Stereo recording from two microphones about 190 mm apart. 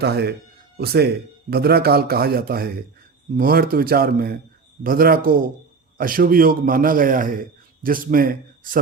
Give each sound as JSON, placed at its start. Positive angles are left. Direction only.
{"t": 0.0, "sound": "a man's voice", "side_deg": -60}